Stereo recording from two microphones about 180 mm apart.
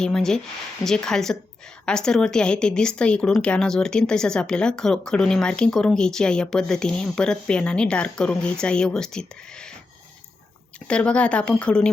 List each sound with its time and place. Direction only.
0.0 s speech: 5° left (ahead or behind)
10.8 s speech: 5° left (ahead or behind)